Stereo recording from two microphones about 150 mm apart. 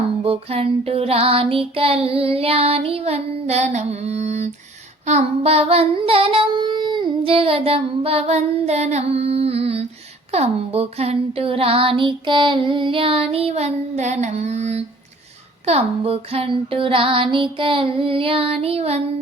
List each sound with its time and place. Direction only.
0.3 s child singing: 40° right (ahead or behind)